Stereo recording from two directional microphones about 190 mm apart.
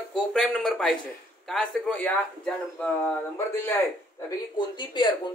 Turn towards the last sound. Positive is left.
turn(degrees=25)  # may be behind; listen again after turning